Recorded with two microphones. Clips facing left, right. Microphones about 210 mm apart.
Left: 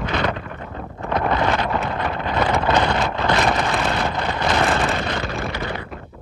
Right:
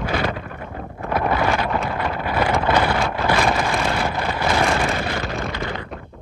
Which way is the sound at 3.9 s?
10° right (ahead or behind).